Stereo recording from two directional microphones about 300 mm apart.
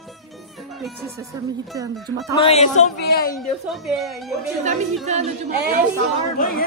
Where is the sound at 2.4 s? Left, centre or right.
Left.